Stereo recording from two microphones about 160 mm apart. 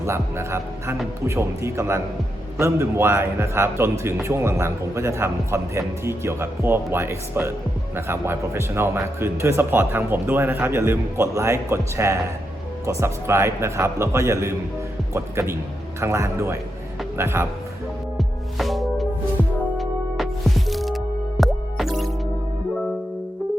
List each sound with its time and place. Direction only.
0.0 s a man's voice: 15° right (ahead or behind)
18.2 s music: centre (ahead or behind)